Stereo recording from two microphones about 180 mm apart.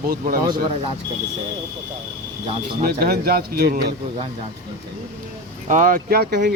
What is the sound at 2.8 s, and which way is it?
Speech, 60° right (ahead or behind).